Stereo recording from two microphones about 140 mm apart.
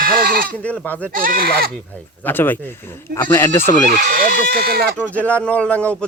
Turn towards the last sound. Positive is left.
turn(degrees=10)  # may be behind; listen again after turning